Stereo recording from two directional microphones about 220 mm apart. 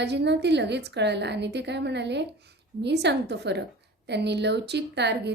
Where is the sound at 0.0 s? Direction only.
50° right (ahead or behind).